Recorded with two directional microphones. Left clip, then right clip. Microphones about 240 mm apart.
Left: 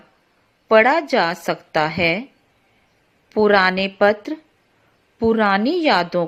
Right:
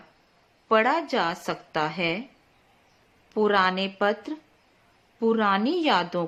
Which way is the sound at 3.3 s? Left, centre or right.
Left.